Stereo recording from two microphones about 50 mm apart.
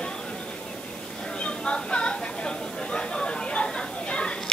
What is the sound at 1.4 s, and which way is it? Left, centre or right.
Chatter, centre.